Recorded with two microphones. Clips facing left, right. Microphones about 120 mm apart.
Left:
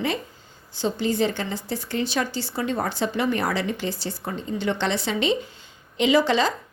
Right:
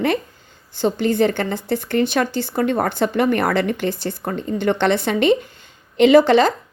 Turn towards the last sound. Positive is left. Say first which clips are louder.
# right 8 dB
turn(degrees=-55)  # may be behind; listen again after turning